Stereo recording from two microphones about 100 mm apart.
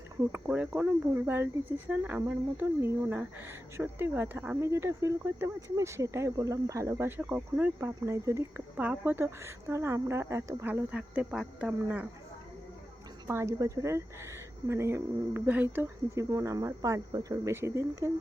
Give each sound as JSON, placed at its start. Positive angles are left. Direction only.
{"t": 0.3, "sound": "speech", "side_deg": -15}
{"t": 7.2, "sound": "speech", "side_deg": -15}
{"t": 8.7, "sound": "speech", "side_deg": -15}
{"t": 13.2, "sound": "speech", "side_deg": -25}
{"t": 16.3, "sound": "speech", "side_deg": -35}
{"t": 17.5, "sound": "speech", "side_deg": -25}